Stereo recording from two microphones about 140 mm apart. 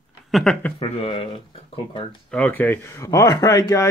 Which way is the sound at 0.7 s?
45° left (ahead or behind).